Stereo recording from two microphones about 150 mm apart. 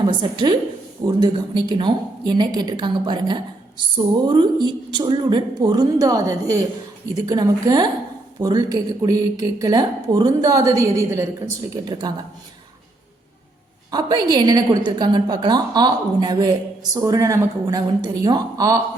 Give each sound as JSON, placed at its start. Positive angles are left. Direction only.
{"t": 0.0, "sound": "a woman's voice", "side_deg": -30}
{"t": 13.9, "sound": "a woman's voice", "side_deg": -30}